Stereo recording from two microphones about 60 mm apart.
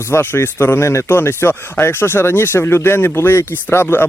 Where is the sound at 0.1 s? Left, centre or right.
Left.